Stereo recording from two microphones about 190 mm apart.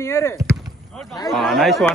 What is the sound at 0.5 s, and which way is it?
Basketball bounce, centre (ahead or behind).